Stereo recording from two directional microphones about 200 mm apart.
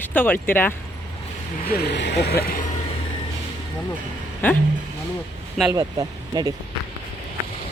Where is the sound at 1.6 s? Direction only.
50° left (ahead or behind).